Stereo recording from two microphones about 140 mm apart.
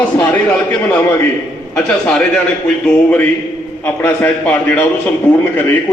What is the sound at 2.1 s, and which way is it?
A man's voice, 5° left (ahead or behind).